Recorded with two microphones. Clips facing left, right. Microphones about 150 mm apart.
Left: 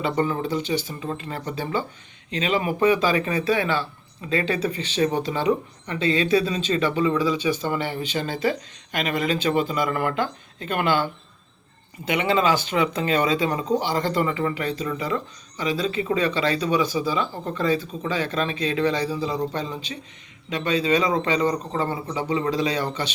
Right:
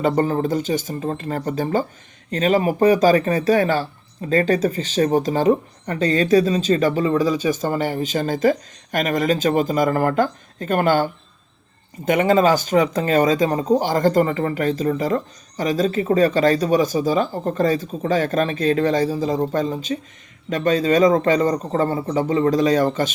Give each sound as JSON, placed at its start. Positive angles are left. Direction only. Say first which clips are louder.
{"t": 0.0, "sound": "speech", "louder": "right 5 dB", "side_deg": -45}